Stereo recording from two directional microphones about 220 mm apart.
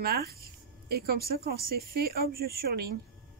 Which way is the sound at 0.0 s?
45° right (ahead or behind).